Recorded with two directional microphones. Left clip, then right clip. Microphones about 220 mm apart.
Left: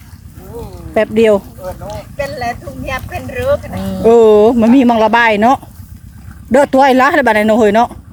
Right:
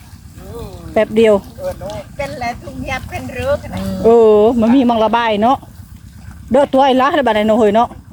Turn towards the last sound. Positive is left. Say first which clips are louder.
# left 2 dB
turn(degrees=10)  # may be behind; listen again after turning